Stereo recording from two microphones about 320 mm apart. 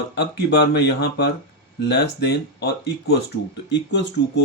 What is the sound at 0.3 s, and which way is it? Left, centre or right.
Speech, left.